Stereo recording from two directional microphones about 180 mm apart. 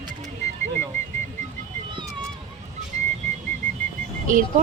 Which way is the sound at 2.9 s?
40° right (ahead or behind).